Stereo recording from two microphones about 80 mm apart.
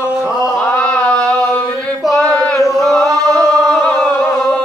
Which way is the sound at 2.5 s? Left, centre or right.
Centre.